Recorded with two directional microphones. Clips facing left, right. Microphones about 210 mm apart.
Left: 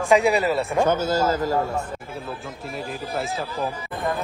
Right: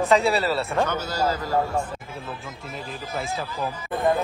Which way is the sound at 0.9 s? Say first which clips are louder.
Left 4 dB; 45° left (ahead or behind).